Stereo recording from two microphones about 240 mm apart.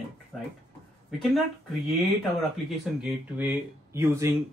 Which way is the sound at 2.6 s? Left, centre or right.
Centre.